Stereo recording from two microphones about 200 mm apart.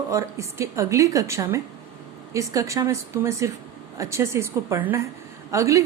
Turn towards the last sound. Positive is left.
turn(degrees=-15)  # may be behind; listen again after turning